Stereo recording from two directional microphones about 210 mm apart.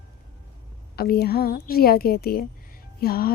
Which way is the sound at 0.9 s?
45° left (ahead or behind).